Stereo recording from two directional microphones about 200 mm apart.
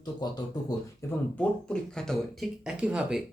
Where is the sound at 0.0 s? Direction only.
20° left (ahead or behind).